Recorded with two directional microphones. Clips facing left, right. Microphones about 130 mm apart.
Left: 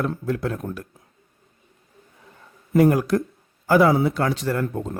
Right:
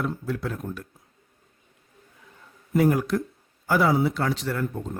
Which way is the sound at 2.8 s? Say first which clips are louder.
Left 4 dB; 70° left (ahead or behind).